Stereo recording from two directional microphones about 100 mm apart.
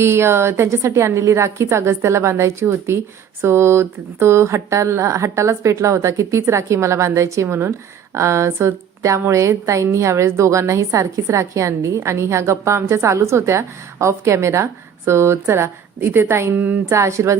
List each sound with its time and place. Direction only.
0.0 s a woman's voice: 25° right (ahead or behind)